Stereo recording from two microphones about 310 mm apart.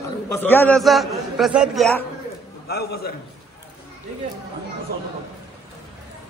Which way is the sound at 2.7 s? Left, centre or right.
Left.